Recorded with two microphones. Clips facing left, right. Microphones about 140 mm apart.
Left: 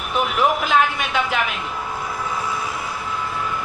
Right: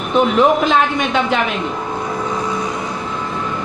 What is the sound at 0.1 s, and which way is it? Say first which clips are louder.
A woman's voice: right 7 dB; 25° right (ahead or behind).